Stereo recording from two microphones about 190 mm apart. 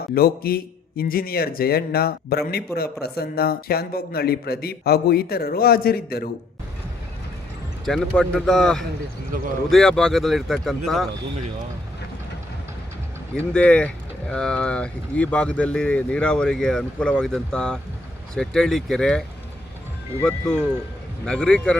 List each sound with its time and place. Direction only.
0.1 s a man's voice: 55° left (ahead or behind)
7.9 s speech: centre (ahead or behind)
9.3 s speech: 45° right (ahead or behind)
9.6 s speech: centre (ahead or behind)
13.3 s speech: 5° left (ahead or behind)
21.2 s speech: 5° left (ahead or behind)